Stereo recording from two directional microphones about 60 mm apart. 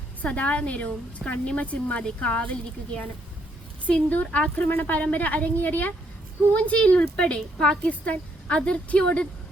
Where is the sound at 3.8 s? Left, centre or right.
Left.